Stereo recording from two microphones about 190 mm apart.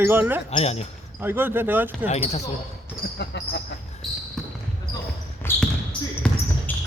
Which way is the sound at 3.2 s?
65° left (ahead or behind).